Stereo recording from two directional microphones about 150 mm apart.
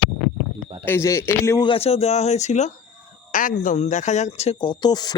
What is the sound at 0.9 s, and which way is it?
Speech, 15° left (ahead or behind).